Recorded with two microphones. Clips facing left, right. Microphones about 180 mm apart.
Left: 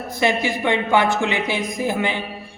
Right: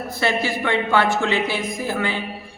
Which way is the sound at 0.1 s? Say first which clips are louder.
Left 2 dB; 15° left (ahead or behind).